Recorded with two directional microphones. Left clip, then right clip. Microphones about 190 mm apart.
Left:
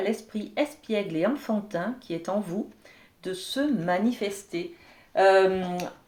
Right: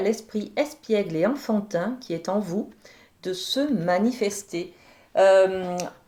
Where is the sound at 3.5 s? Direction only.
45° right (ahead or behind).